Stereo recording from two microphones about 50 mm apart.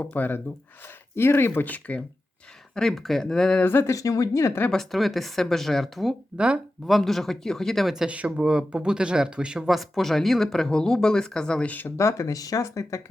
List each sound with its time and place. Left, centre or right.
0.0 s speech: left
1.1 s speech: left
1.6 s speech: left
2.7 s speech: centre
3.6 s speech: left
3.8 s speech: left
4.7 s speech: centre
6.3 s speech: right
6.8 s speech: centre
8.0 s speech: right
8.4 s speech: centre
9.6 s speech: centre
11.9 s speech: left